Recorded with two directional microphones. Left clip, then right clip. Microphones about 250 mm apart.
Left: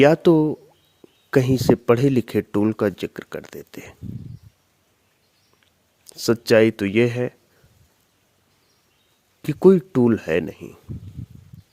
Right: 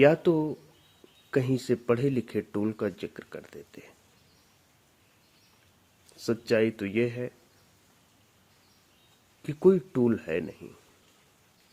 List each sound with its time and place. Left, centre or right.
0.0 s speech: left
6.1 s speech: left
9.4 s speech: left